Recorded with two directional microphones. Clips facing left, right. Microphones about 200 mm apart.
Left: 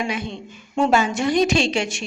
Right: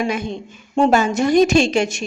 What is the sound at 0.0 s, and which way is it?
A woman's voice, 45° right (ahead or behind).